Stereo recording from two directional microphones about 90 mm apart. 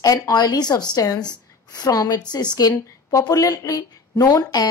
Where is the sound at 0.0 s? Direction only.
45° left (ahead or behind).